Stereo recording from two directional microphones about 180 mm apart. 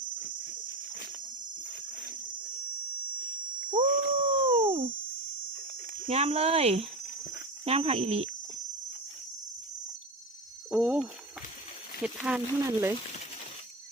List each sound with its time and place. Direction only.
3.8 s dog: 50° right (ahead or behind)
4.2 s dog: 25° right (ahead or behind)
6.1 s speech: 35° right (ahead or behind)
10.7 s speech: 5° right (ahead or behind)
12.2 s speech: 10° right (ahead or behind)